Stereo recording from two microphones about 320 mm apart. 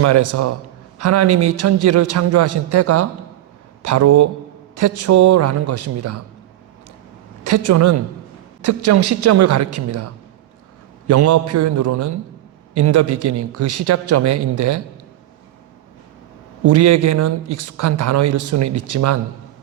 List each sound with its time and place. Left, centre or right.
0.0 s a man's voice: right
7.5 s a man's voice: right
11.1 s a man's voice: right
12.8 s a man's voice: right
13.1 s speech: right
16.6 s a man's voice: right